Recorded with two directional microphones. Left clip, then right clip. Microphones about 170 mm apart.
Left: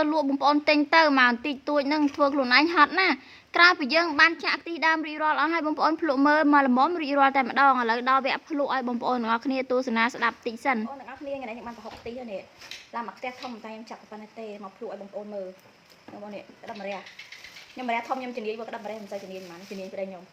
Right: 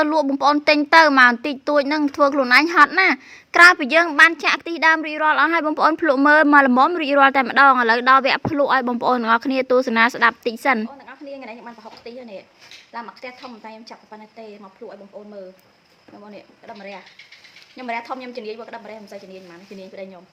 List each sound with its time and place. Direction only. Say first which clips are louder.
0.0 s a woman's voice: right 6 dB; 30° right (ahead or behind)
11.3 s speech: right 1 dB; 15° right (ahead or behind)
16.3 s speech: right 3 dB; 15° right (ahead or behind)